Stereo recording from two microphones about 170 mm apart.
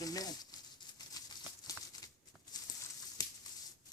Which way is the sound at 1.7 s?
20° left (ahead or behind).